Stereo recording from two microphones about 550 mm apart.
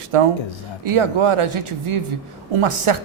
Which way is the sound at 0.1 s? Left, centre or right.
Right.